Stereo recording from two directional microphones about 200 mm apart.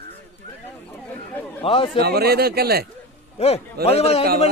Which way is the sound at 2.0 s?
50° right (ahead or behind).